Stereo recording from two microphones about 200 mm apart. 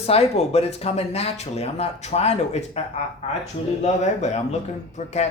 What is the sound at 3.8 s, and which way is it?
Speech, 35° left (ahead or behind).